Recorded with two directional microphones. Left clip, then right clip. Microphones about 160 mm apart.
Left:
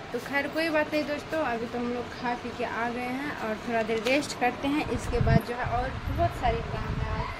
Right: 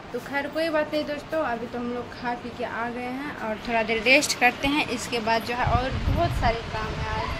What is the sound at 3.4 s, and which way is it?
Speech, 10° right (ahead or behind).